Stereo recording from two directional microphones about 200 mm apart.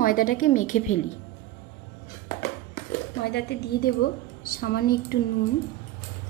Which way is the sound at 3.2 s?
55° left (ahead or behind).